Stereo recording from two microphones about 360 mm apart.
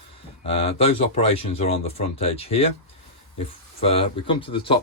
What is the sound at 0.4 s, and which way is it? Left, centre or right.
Speech, centre.